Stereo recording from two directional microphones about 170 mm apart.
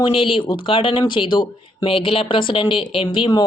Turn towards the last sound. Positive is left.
turn(degrees=30)  # may be behind; listen again after turning